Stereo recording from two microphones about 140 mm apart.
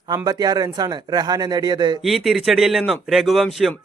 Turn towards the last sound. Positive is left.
turn(degrees=0)  # may be behind; listen again after turning